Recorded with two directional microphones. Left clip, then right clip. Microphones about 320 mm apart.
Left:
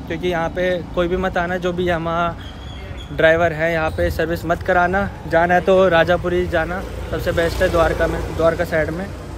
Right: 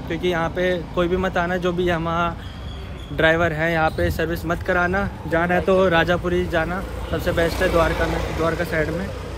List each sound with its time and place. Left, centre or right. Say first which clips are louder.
0.1 s speech: left 1 dB; centre